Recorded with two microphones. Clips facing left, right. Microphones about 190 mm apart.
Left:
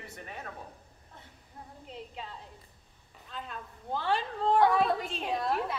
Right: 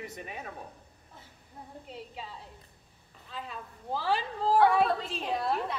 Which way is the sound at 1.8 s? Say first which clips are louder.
Left 1 dB; 5° right (ahead or behind).